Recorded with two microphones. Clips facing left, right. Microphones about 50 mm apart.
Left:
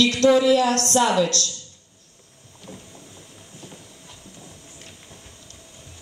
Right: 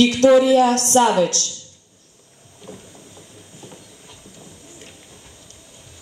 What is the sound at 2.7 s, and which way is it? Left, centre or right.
Boat, centre.